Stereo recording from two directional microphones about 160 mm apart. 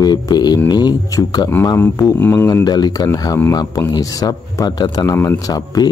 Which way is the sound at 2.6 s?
25° left (ahead or behind).